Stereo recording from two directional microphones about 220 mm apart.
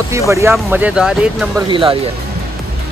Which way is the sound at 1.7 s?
25° right (ahead or behind).